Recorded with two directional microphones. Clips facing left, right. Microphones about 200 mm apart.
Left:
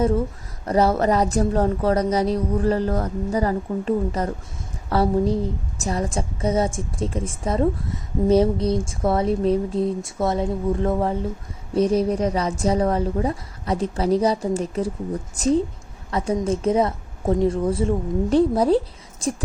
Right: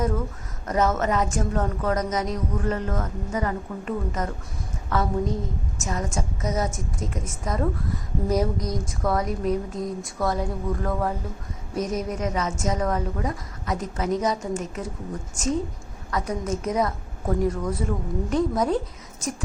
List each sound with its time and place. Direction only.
0.6 s a woman's voice: 35° left (ahead or behind)